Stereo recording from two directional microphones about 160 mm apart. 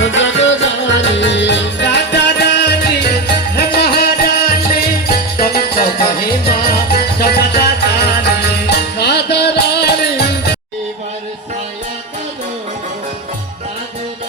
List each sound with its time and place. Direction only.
0.9 s music: 90° left